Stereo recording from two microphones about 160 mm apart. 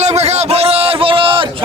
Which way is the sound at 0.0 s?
45° right (ahead or behind).